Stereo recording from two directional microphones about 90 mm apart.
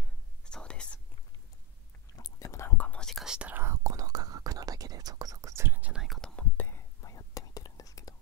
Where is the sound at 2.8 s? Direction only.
15° left (ahead or behind).